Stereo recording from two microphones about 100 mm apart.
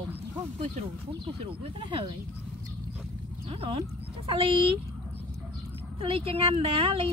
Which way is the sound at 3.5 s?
65° right (ahead or behind).